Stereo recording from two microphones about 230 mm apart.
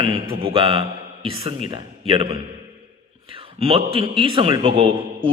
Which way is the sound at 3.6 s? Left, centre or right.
Right.